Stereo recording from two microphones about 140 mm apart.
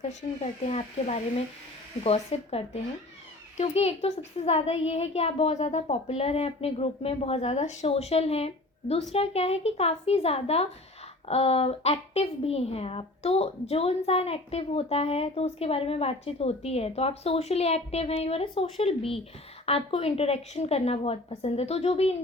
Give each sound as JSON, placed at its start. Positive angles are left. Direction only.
{"t": 0.0, "sound": "a woman's voice", "side_deg": 55}